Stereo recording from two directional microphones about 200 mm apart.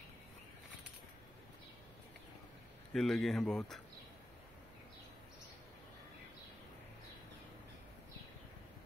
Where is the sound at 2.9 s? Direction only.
Centre (ahead or behind).